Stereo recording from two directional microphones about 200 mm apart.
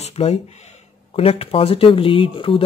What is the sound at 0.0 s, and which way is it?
Speech, 30° left (ahead or behind).